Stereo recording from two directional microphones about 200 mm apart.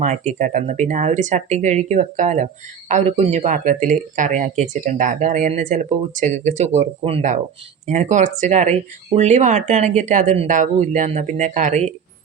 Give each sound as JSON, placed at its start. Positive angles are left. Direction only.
{"t": 0.0, "sound": "speech", "side_deg": -35}